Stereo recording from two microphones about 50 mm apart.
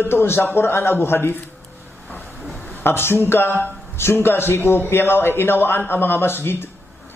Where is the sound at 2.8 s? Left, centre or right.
Left.